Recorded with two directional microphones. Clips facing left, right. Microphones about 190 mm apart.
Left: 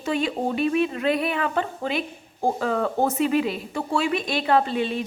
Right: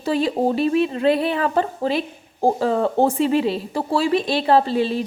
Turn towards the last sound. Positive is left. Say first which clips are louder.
# right 4 dB
turn(degrees=-30)  # may be behind; listen again after turning